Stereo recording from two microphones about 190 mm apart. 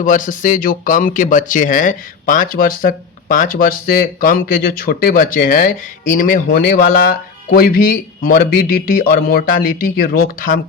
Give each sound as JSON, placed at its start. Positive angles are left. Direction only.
{"t": 0.0, "sound": "speech", "side_deg": 45}